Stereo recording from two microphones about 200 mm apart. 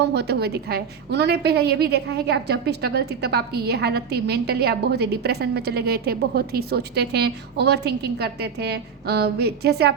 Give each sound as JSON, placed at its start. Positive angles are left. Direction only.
{"t": 0.0, "sound": "a woman's voice", "side_deg": -55}